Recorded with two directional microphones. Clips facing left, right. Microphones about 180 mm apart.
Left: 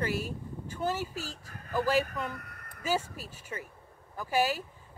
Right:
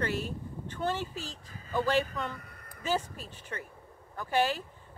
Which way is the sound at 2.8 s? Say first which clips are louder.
Even; 10° left (ahead or behind).